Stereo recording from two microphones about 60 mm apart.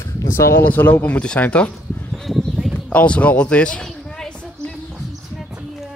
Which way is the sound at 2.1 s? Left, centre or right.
Centre.